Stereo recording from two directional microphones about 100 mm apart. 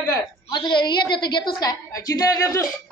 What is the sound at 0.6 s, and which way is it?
A woman's voice, 50° left (ahead or behind).